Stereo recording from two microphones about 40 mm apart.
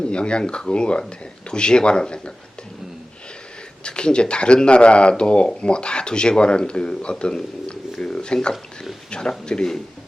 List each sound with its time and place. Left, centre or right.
0.1 s speech: left
3.8 s speech: left
7.7 s a sound: left
9.0 s speech: left